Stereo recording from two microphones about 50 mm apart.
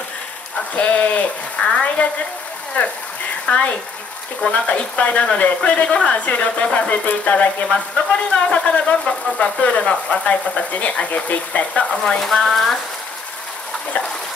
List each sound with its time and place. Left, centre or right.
0.7 s speech: left
7.7 s speech: centre
11.9 s frying: centre